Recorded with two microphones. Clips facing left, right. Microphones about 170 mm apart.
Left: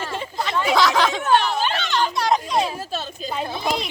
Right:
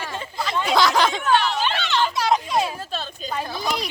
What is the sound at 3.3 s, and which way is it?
Speech, 20° left (ahead or behind).